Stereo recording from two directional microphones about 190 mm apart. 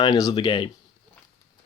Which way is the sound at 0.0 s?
20° left (ahead or behind).